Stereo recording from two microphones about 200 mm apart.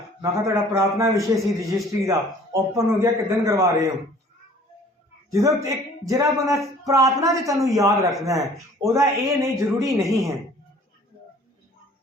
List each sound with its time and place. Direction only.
0.2 s speech: 15° right (ahead or behind)
5.3 s speech: 15° right (ahead or behind)